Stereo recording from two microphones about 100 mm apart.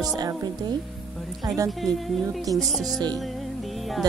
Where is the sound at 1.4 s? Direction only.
35° right (ahead or behind).